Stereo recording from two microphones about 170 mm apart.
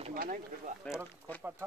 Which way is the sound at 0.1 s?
55° right (ahead or behind).